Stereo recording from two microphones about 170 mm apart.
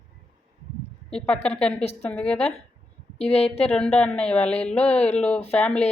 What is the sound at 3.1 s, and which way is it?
Speech, 40° left (ahead or behind).